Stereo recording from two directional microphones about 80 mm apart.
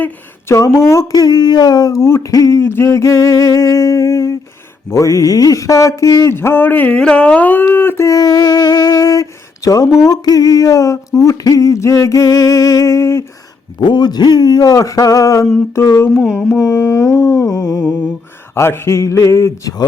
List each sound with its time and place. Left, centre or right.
0.4 s music: left
1.1 s a man's voice: left
2.0 s music: left
2.9 s speech: left
6.3 s speech: left
8.0 s speech: left
13.7 s a man's voice: left
16.6 s music: left